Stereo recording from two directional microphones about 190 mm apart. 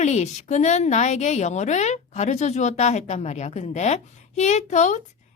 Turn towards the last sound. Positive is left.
turn(degrees=40)  # may be behind; listen again after turning